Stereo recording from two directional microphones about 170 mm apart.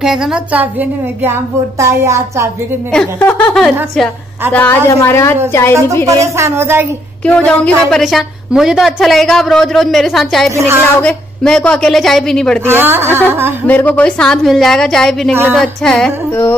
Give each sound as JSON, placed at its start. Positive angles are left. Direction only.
{"t": 0.0, "sound": "a woman's voice", "side_deg": -5}
{"t": 2.9, "sound": "a woman's voice", "side_deg": 10}
{"t": 6.0, "sound": "a woman's voice", "side_deg": -15}
{"t": 7.2, "sound": "a woman's voice", "side_deg": 5}
{"t": 10.5, "sound": "a woman's voice", "side_deg": -15}
{"t": 11.0, "sound": "a woman's voice", "side_deg": 5}
{"t": 12.6, "sound": "a woman's voice", "side_deg": -15}
{"t": 13.7, "sound": "a woman's voice", "side_deg": 10}